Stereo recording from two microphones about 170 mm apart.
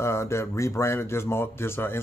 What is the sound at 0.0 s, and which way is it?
Speech, 15° left (ahead or behind).